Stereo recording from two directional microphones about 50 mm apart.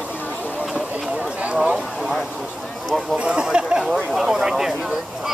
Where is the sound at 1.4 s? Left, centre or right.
Right.